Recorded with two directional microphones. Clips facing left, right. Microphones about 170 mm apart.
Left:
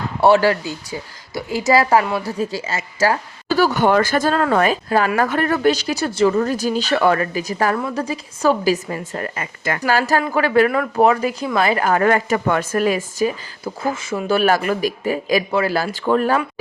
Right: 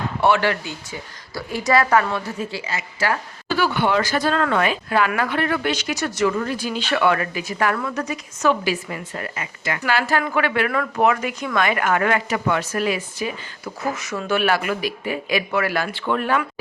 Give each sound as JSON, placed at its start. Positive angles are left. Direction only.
{"t": 0.2, "sound": "a woman's voice", "side_deg": 35}
{"t": 2.2, "sound": "speech", "side_deg": 40}
{"t": 4.4, "sound": "speech", "side_deg": 35}
{"t": 10.7, "sound": "a woman's voice", "side_deg": 25}
{"t": 14.3, "sound": "speech", "side_deg": 40}